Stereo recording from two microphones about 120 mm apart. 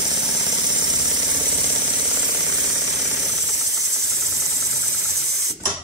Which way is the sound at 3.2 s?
Centre (ahead or behind).